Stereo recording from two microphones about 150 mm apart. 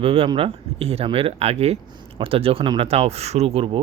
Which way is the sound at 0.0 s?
40° right (ahead or behind).